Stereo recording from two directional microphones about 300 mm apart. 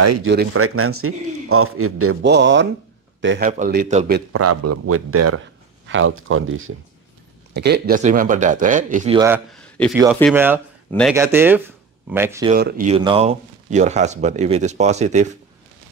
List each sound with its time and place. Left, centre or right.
0.2 s a man's voice: right
3.4 s speech: right
4.3 s a man's voice: right
9.1 s speech: centre
9.5 s a sound: centre
10.3 s speech: centre
11.1 s speech: centre
12.5 s speech: right